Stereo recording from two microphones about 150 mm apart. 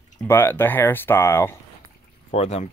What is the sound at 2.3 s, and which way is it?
Speech, 45° left (ahead or behind).